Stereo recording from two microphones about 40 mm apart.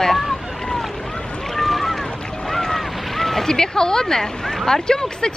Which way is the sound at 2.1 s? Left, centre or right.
Centre.